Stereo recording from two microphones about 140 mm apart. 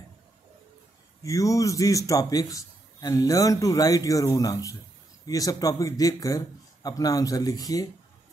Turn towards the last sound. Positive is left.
turn(degrees=25)  # may be behind; listen again after turning